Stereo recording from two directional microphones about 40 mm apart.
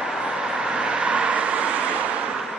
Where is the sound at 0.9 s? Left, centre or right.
Right.